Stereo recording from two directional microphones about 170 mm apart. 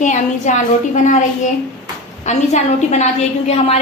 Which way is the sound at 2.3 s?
45° left (ahead or behind).